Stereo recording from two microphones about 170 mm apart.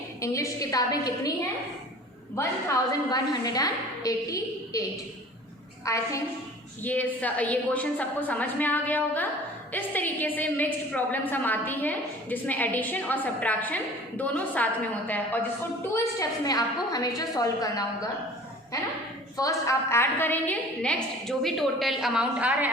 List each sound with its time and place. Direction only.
0.2 s a woman's voice: 20° left (ahead or behind)
2.3 s a woman's voice: 15° left (ahead or behind)
5.8 s a woman's voice: 20° left (ahead or behind)
19.4 s a woman's voice: 20° left (ahead or behind); by 22.7 s 10° right (ahead or behind)